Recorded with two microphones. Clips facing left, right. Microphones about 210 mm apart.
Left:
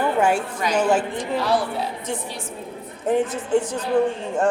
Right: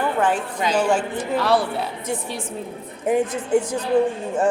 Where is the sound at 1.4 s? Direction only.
65° right (ahead or behind).